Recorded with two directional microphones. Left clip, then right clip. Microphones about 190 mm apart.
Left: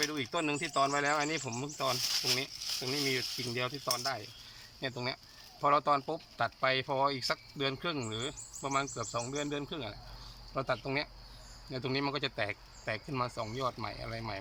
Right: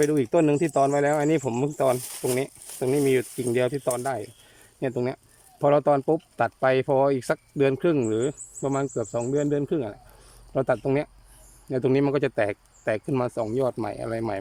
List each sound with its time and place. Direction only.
0.0 s speech: 45° right (ahead or behind)